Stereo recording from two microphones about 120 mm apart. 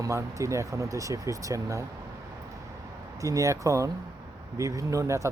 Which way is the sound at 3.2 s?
25° right (ahead or behind).